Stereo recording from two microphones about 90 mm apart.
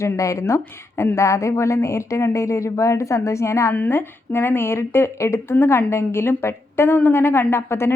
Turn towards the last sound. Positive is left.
turn(degrees=30)  # may be behind; listen again after turning